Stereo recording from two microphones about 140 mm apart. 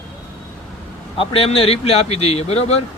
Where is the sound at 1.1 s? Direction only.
45° left (ahead or behind).